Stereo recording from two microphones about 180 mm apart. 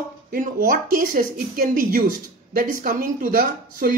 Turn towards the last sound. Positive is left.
turn(degrees=-50)  # may be behind; listen again after turning